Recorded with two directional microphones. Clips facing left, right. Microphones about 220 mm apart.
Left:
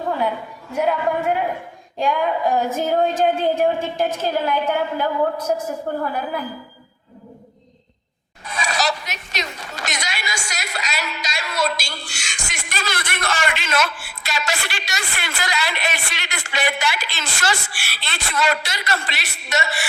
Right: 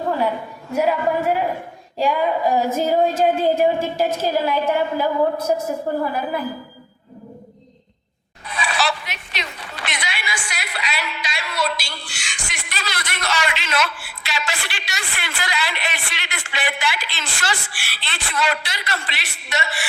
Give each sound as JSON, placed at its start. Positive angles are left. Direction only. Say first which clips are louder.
{"t": 0.7, "sound": "a woman's voice", "louder": "right 1 dB", "side_deg": -5}
{"t": 8.4, "sound": "speech", "louder": "even", "side_deg": 45}